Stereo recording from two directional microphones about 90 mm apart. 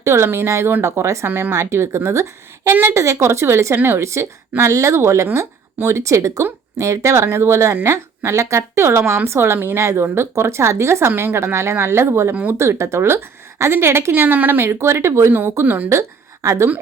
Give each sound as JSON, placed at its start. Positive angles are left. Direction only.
{"t": 0.0, "sound": "speech", "side_deg": -30}
{"t": 1.3, "sound": "a woman's voice", "side_deg": -25}
{"t": 12.3, "sound": "speech", "side_deg": -15}
{"t": 12.5, "sound": "a woman's voice", "side_deg": -30}
{"t": 15.9, "sound": "a woman's voice", "side_deg": -35}